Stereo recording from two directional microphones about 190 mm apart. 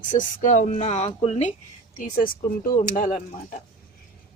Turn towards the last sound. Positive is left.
turn(degrees=45)  # may be behind; listen again after turning